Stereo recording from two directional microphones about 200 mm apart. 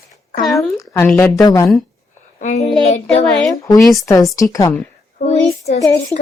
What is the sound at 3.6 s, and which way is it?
A woman's voice, 15° left (ahead or behind).